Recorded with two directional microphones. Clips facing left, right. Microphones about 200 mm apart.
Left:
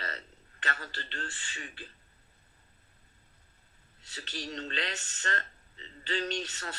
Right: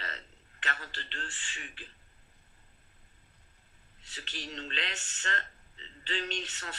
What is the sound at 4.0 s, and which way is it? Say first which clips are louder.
Speech: left 3 dB; 40° left (ahead or behind).